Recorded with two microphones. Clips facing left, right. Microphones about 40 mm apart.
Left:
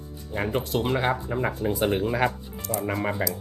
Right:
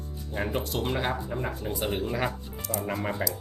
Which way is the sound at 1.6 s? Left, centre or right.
Left.